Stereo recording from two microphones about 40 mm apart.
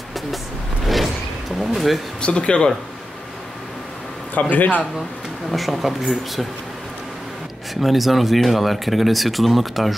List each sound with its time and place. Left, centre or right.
0.8 s a sound: centre
1.6 s speech: centre
2.2 s speech: left
4.4 s a man's voice: left
5.5 s speech: centre
7.7 s speech: centre